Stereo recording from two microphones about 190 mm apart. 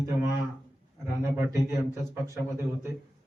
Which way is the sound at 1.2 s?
15° right (ahead or behind).